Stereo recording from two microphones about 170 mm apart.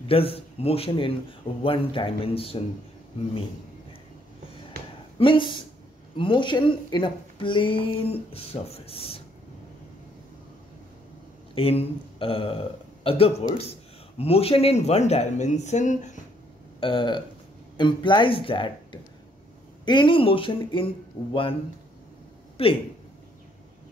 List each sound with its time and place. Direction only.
0.1 s speech: 35° left (ahead or behind)
5.2 s speech: 30° left (ahead or behind)
11.5 s speech: 35° left (ahead or behind)
16.8 s speech: 30° left (ahead or behind)
22.6 s speech: 35° left (ahead or behind)